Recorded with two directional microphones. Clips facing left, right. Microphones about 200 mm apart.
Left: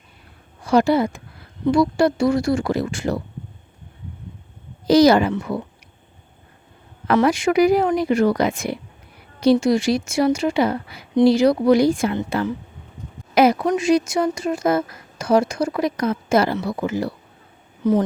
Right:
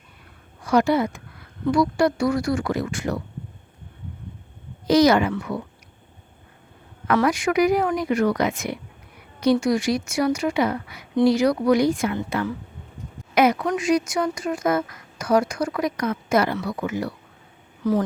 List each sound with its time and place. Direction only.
0.6 s a woman's voice: 30° left (ahead or behind)
4.9 s a woman's voice: 30° left (ahead or behind)
7.1 s a woman's voice: 25° left (ahead or behind)